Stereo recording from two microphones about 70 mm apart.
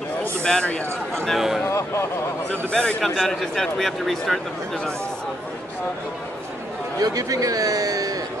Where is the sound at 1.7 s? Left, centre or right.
Left.